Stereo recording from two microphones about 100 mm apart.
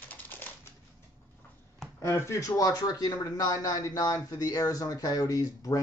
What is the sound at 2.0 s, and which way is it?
A man's voice, 30° left (ahead or behind).